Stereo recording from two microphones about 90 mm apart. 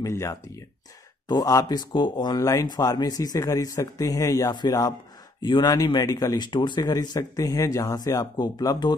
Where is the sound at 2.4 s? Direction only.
45° left (ahead or behind).